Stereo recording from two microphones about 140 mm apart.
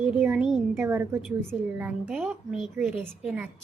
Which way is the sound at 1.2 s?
5° right (ahead or behind).